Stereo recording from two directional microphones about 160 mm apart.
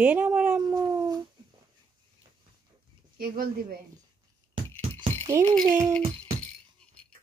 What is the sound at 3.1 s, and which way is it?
Speech, 65° right (ahead or behind).